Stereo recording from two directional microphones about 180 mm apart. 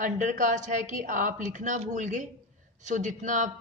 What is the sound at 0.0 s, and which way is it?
A woman's voice, 45° right (ahead or behind).